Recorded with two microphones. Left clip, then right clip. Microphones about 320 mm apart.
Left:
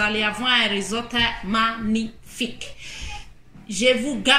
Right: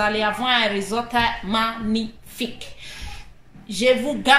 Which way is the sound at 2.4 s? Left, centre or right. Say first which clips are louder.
Left 1 dB; right.